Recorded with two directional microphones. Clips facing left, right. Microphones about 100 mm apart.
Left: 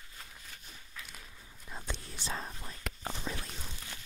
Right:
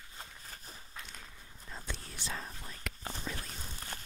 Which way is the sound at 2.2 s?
30° left (ahead or behind).